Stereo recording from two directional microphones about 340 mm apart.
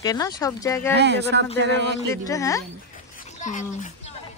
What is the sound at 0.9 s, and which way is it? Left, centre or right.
Speech, right.